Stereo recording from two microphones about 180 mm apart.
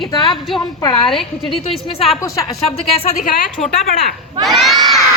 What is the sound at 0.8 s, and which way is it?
Speech, 20° left (ahead or behind).